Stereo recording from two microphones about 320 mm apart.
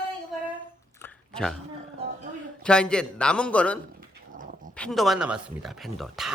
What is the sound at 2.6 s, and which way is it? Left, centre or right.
Speech, centre.